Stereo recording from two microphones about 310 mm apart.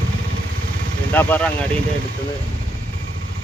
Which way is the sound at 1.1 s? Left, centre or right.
Centre.